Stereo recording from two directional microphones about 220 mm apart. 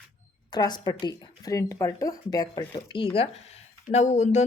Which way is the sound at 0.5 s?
20° left (ahead or behind).